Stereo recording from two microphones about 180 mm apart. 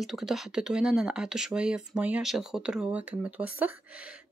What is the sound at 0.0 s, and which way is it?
Speech, centre (ahead or behind).